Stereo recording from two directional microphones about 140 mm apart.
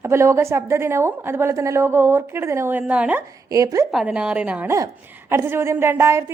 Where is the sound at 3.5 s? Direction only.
25° right (ahead or behind).